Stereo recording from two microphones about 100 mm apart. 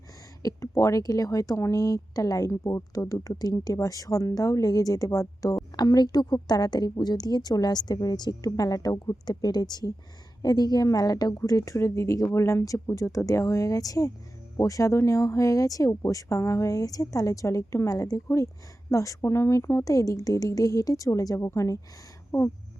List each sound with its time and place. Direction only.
0.4 s speech: 30° left (ahead or behind)